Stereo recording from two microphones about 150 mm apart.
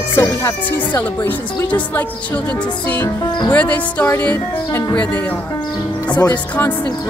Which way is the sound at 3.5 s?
10° left (ahead or behind).